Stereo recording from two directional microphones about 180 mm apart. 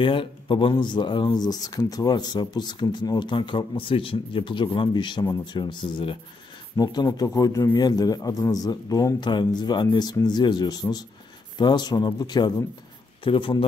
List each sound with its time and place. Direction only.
0.0 s speech: 30° left (ahead or behind)